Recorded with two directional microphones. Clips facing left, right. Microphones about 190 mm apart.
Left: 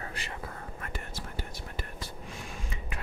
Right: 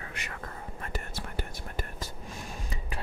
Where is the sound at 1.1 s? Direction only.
60° right (ahead or behind).